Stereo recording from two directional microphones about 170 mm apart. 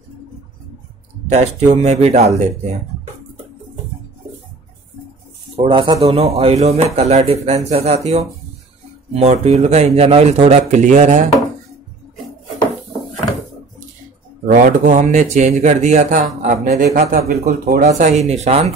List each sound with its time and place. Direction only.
1.3 s a man's voice: 40° right (ahead or behind)
5.6 s a man's voice: 30° right (ahead or behind); by 11.2 s 50° right (ahead or behind)
14.4 s speech: 50° right (ahead or behind)
17.3 s speech: 60° right (ahead or behind)
17.8 s a man's voice: 45° right (ahead or behind)